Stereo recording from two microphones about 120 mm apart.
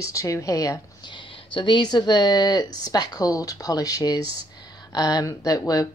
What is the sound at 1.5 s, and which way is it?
Speech, 40° left (ahead or behind).